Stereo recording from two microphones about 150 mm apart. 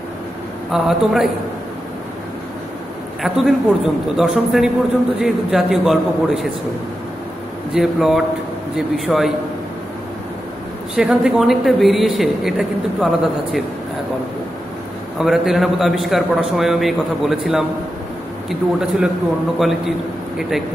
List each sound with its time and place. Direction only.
0.7 s a woman's voice: centre (ahead or behind)
3.2 s a woman's voice: centre (ahead or behind)
7.7 s a woman's voice: centre (ahead or behind)
11.0 s a woman's voice: centre (ahead or behind)
15.1 s a woman's voice: centre (ahead or behind)
20.3 s a woman's voice: centre (ahead or behind)